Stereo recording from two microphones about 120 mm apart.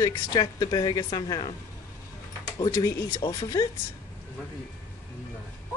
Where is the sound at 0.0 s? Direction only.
30° left (ahead or behind).